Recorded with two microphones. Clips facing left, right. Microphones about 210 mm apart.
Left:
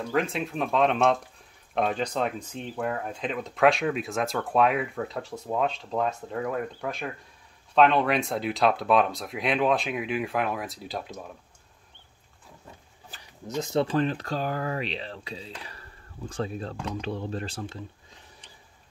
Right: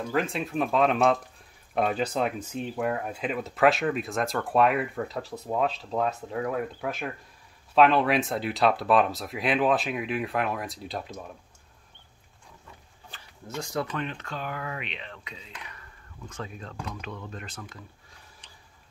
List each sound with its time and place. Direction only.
0.1 s speech: centre (ahead or behind)
13.2 s speech: 20° left (ahead or behind)